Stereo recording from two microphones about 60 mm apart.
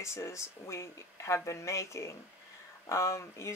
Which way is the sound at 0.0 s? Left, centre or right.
Left.